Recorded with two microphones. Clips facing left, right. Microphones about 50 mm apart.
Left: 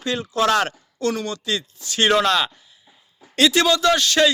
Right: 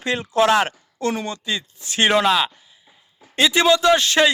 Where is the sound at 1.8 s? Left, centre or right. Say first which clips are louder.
Right 2 dB; right.